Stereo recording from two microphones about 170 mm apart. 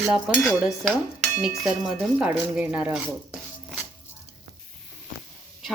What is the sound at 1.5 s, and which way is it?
Dishes, 5° right (ahead or behind).